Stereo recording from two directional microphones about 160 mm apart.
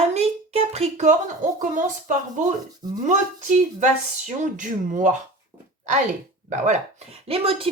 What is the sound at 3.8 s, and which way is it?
Speech, 50° right (ahead or behind).